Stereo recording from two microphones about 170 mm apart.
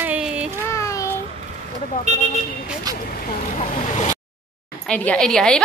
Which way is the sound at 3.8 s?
45° left (ahead or behind).